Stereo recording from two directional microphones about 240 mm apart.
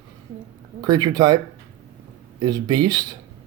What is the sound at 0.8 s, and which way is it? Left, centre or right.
Speech, centre.